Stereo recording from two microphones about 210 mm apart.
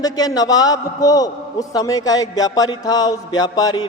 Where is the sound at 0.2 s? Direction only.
15° left (ahead or behind).